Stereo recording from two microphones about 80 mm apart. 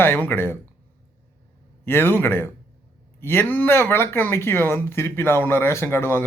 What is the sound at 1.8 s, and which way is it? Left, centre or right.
A man's voice, left.